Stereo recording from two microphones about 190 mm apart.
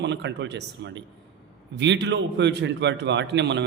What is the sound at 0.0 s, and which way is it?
A man's voice, 65° right (ahead or behind).